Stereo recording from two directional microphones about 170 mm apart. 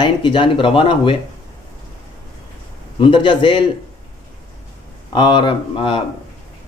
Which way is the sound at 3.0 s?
30° left (ahead or behind).